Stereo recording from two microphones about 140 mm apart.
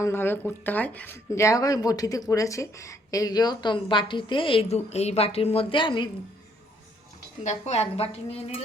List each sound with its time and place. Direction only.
0.0 s speech: 15° left (ahead or behind); by 6.1 s 35° left (ahead or behind)
7.4 s a woman's voice: 50° left (ahead or behind)